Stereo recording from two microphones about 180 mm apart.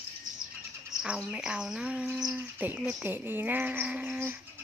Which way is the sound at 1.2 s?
5° right (ahead or behind).